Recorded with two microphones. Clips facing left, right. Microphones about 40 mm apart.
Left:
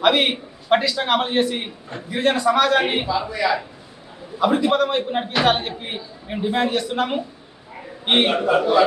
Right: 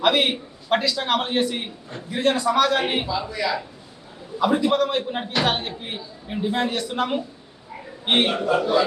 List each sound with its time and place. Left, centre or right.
0.0 s a man's voice: centre